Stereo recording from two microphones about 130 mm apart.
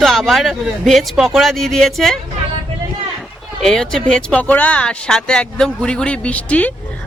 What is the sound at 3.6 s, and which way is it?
Speech, 5° left (ahead or behind).